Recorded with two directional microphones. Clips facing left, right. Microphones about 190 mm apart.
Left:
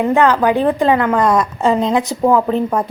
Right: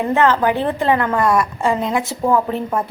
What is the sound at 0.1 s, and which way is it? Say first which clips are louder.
A woman's voice: left 1 dB; 15° left (ahead or behind).